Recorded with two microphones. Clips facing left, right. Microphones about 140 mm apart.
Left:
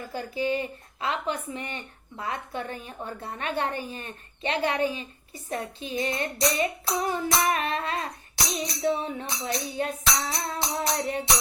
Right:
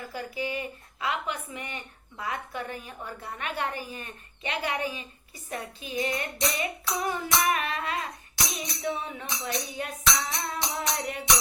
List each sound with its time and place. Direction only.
0.1 s speech: 30° left (ahead or behind)
5.5 s music: 30° left (ahead or behind)